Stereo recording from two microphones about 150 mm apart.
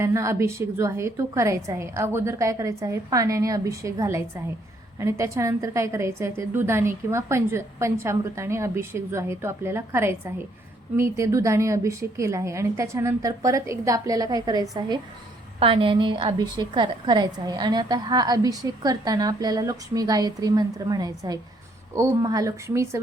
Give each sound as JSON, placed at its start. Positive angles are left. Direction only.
{"t": 0.0, "sound": "a woman's voice", "side_deg": -20}